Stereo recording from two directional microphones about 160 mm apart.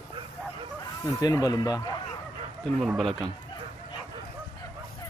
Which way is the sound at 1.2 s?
25° left (ahead or behind).